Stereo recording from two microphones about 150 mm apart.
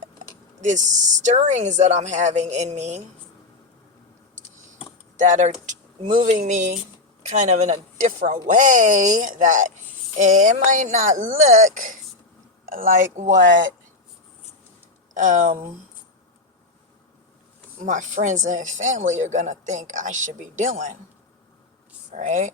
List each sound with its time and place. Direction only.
1.2 s a woman's voice: 55° right (ahead or behind)
5.1 s a woman's voice: 55° right (ahead or behind)
15.1 s speech: 55° right (ahead or behind)
17.8 s speech: 55° right (ahead or behind)
22.1 s speech: 55° right (ahead or behind)